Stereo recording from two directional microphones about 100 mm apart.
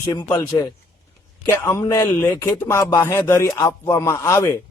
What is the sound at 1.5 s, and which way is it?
Speech, 25° left (ahead or behind).